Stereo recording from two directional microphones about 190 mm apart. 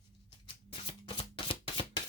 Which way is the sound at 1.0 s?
30° left (ahead or behind).